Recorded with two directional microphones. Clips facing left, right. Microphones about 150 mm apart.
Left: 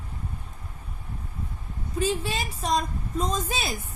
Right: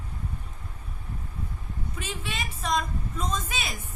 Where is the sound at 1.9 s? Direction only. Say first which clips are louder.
Left 10 dB; 35° left (ahead or behind).